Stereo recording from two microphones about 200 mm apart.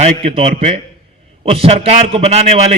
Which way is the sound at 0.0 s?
30° right (ahead or behind).